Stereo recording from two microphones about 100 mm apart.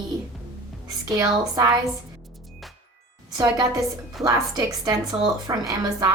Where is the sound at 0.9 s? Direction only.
35° right (ahead or behind).